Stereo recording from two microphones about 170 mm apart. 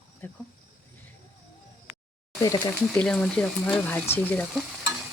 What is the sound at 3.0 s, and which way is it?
Speech, 5° left (ahead or behind).